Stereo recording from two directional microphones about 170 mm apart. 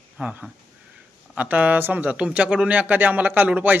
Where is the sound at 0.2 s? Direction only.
5° right (ahead or behind).